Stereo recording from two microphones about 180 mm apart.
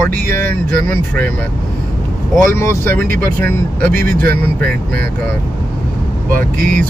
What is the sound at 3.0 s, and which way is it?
Speech, 55° right (ahead or behind).